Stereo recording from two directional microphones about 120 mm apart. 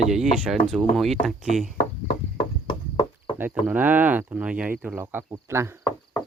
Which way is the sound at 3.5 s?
10° right (ahead or behind).